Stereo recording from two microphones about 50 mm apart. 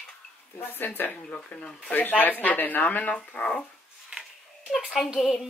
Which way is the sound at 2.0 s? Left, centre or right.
Left.